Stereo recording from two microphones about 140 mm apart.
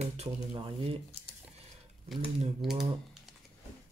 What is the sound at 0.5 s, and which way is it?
Speech, 35° right (ahead or behind).